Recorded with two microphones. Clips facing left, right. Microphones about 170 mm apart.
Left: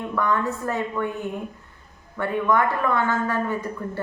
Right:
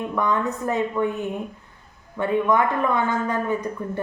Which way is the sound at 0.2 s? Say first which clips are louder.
Even; 20° right (ahead or behind).